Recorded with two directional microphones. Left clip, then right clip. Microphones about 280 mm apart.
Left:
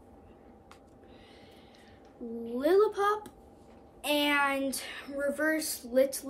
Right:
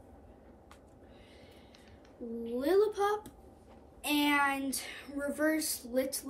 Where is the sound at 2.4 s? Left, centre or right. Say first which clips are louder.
Left 3 dB; centre.